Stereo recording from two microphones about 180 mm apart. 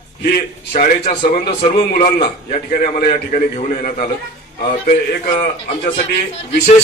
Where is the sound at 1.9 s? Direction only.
55° left (ahead or behind).